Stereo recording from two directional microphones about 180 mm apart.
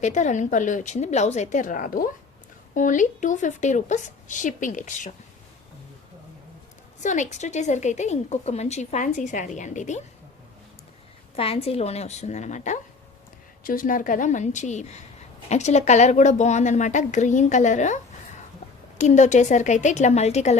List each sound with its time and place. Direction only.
0.0 s a woman's voice: 40° left (ahead or behind)
7.0 s a woman's voice: 45° left (ahead or behind)
11.3 s a woman's voice: 35° left (ahead or behind)